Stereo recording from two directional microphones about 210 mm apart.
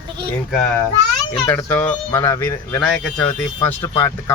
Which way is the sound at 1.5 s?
10° left (ahead or behind).